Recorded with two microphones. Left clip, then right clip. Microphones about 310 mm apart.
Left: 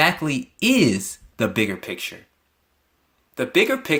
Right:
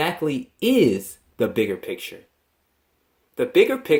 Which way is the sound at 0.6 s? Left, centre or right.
Left.